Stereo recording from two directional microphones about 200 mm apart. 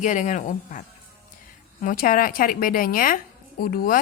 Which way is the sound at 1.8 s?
45° left (ahead or behind).